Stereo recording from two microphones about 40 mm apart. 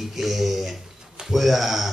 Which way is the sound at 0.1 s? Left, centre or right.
Centre.